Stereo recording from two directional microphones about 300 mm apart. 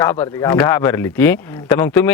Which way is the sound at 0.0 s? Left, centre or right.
Centre.